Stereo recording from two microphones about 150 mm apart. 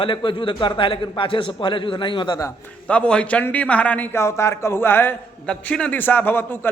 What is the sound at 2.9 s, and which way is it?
A man's voice, 5° left (ahead or behind).